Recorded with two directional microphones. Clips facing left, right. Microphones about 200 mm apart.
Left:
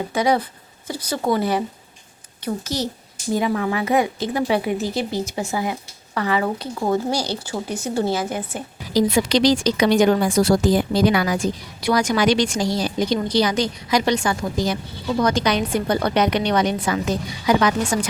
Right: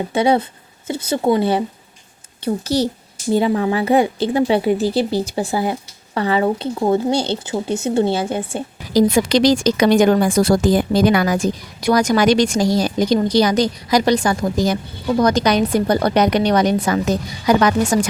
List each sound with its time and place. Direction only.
0.1 s a woman's voice: 25° right (ahead or behind)
8.9 s a woman's voice: 45° right (ahead or behind)